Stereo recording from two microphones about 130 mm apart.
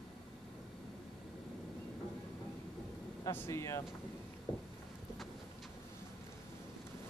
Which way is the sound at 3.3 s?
20° left (ahead or behind).